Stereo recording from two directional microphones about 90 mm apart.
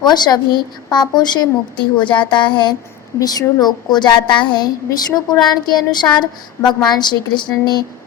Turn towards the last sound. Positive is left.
turn(degrees=55)  # may be behind; listen again after turning